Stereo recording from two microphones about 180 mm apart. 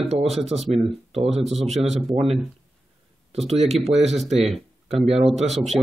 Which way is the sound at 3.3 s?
35° right (ahead or behind).